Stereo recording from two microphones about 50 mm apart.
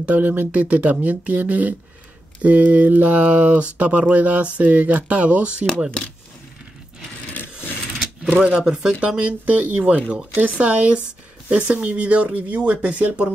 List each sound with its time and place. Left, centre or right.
0.0 s speech: right
7.9 s a sound: centre
8.5 s speech: centre